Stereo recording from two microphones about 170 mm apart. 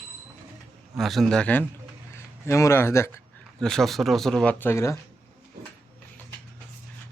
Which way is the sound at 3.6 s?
5° left (ahead or behind).